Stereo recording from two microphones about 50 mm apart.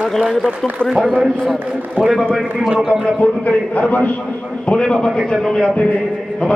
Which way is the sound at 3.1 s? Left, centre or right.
Left.